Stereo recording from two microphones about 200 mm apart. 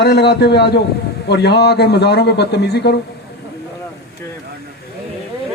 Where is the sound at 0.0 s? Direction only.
55° left (ahead or behind).